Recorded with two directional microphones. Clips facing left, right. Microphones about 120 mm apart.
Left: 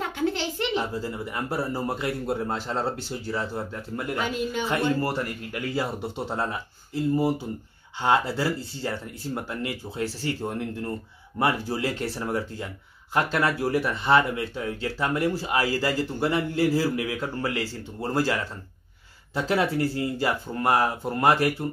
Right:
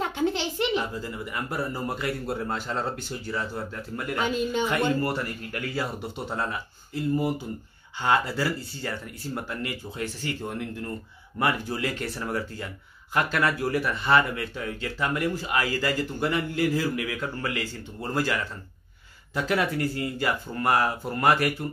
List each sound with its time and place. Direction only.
0.0 s a sound: 20° right (ahead or behind)
0.7 s speech: 30° left (ahead or behind)
4.2 s speech: 25° right (ahead or behind)
5.0 s speech: 20° left (ahead or behind)